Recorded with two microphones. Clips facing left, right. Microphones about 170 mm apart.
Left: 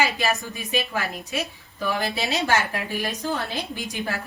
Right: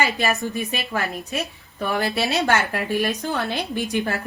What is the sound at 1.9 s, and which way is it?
A woman's voice, 65° right (ahead or behind).